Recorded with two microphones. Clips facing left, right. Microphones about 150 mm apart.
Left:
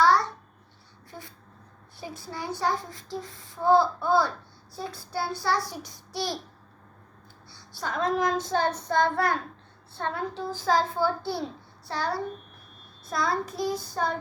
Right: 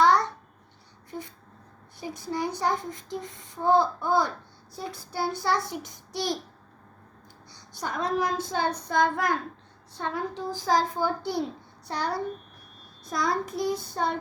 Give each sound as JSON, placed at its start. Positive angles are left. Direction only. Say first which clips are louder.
{"t": 0.0, "sound": "babbling", "louder": "right 1 dB", "side_deg": -20}
{"t": 2.0, "sound": "speech", "louder": "right 6 dB", "side_deg": -20}
{"t": 7.5, "sound": "child singing", "louder": "left 1 dB", "side_deg": -15}
{"t": 11.9, "sound": "speech", "louder": "even", "side_deg": -20}